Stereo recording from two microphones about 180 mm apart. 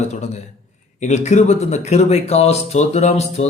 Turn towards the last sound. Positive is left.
turn(degrees=35)  # may be behind; listen again after turning